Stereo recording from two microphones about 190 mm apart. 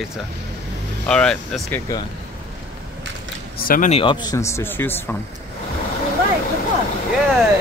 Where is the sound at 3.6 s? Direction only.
50° left (ahead or behind).